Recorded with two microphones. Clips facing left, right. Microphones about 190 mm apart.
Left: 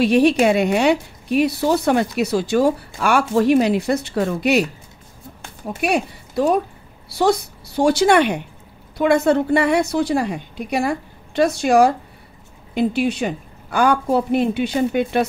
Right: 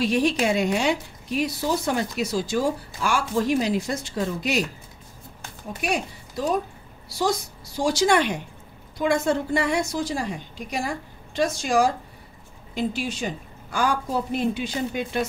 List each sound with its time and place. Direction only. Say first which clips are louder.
0.0 s a woman's voice: left 7 dB; 65° left (ahead or behind)
5.8 s a woman's voice: left 7 dB; 65° left (ahead or behind)